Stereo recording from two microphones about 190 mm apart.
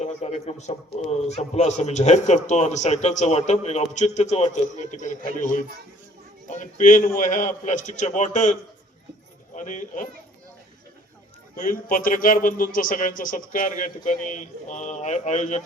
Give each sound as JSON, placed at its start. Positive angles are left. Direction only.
{"t": 0.0, "sound": "speech", "side_deg": 35}
{"t": 9.6, "sound": "speech", "side_deg": 40}
{"t": 11.5, "sound": "a man's voice", "side_deg": 45}